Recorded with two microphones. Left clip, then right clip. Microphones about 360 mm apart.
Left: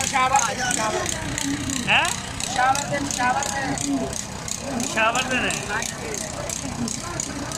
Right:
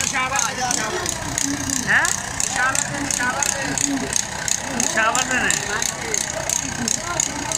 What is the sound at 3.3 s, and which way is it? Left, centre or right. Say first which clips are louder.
Speech: right 2 dB; right.